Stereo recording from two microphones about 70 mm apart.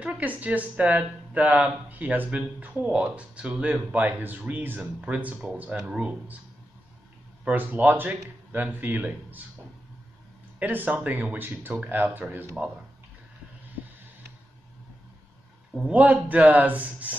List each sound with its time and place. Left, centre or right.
0.0 s speech: right
7.4 s speech: right
10.6 s speech: right
15.7 s speech: centre